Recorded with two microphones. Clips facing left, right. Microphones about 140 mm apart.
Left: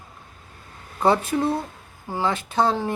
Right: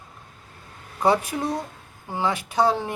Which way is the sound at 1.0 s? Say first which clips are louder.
Left 2 dB; 15° right (ahead or behind).